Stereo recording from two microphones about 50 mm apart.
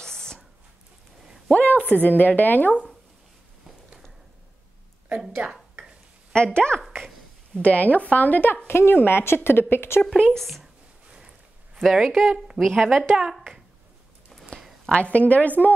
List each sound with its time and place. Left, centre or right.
0.0 s a sound: centre
1.5 s a sound: left
2.0 s speech: left
5.2 s speech: centre
6.3 s speech: centre
7.6 s speech: left
8.6 s a woman's voice: left
10.3 s speech: centre
11.1 s a sound: centre
11.8 s speech: centre
14.3 s a sound: centre
14.9 s speech: left